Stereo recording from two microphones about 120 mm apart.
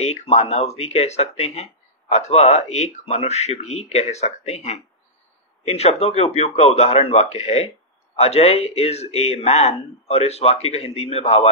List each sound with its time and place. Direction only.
0.0 s speech: 65° left (ahead or behind)
5.7 s speech: 60° left (ahead or behind)